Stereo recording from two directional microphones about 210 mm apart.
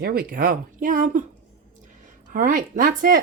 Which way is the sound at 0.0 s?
45° right (ahead or behind).